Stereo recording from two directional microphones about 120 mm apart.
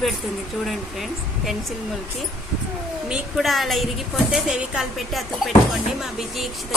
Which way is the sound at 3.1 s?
Centre (ahead or behind).